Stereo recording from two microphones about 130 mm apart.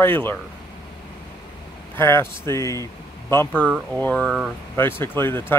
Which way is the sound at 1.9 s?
20° left (ahead or behind).